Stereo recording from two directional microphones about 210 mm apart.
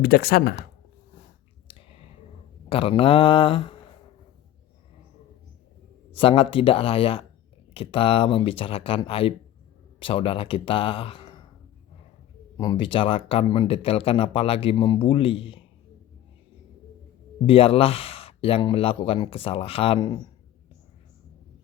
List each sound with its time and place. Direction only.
0.0 s speech: 45° left (ahead or behind)
1.6 s whispering: 25° left (ahead or behind)
2.6 s speech: 25° left (ahead or behind)
6.1 s speech: 25° left (ahead or behind)
12.5 s speech: 20° left (ahead or behind)
17.4 s speech: 25° left (ahead or behind)